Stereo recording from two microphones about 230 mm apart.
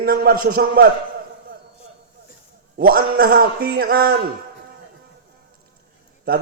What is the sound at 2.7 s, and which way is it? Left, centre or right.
A man's voice, right.